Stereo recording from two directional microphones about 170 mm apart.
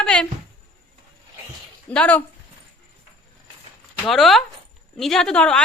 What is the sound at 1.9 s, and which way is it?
Speech, 10° left (ahead or behind).